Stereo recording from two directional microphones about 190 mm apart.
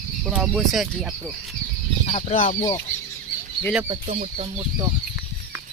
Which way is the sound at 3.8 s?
40° right (ahead or behind).